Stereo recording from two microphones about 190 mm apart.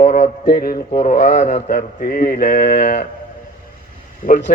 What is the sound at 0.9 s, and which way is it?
Speech, 35° left (ahead or behind).